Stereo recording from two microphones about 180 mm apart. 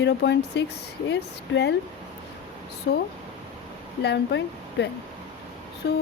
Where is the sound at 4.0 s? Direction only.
70° left (ahead or behind).